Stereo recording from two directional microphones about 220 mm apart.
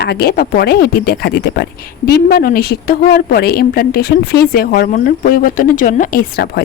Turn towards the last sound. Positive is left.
turn(degrees=45)  # may be behind; listen again after turning